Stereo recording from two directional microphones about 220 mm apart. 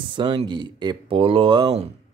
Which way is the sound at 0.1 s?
20° right (ahead or behind).